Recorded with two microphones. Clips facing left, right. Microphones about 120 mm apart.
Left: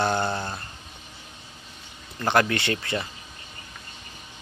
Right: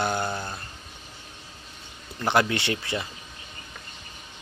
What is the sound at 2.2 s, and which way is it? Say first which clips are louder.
Speech: left 1 dB; 15° right (ahead or behind).